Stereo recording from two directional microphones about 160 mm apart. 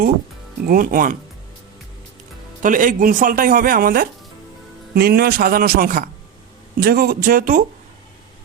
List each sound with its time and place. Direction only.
0.7 s speech: 60° right (ahead or behind)
2.6 s speech: 55° right (ahead or behind)
4.9 s a man's voice: 75° right (ahead or behind); by 7.6 s 55° right (ahead or behind)